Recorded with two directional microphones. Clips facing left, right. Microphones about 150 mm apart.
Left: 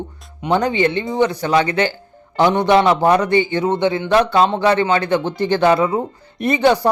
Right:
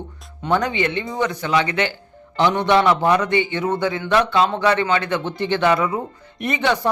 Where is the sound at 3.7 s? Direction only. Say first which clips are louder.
Left 4 dB; 25° left (ahead or behind).